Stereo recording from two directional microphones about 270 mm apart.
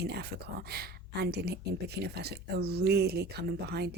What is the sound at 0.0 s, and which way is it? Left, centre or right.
Speech, right.